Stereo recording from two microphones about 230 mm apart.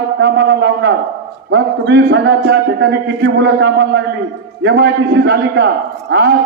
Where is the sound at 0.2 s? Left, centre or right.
Right.